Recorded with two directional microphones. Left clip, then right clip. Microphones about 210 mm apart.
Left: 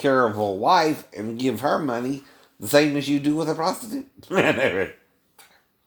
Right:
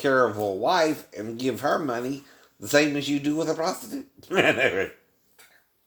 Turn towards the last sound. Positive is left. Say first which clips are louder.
# left 1 dB
turn(degrees=30)  # may be behind; listen again after turning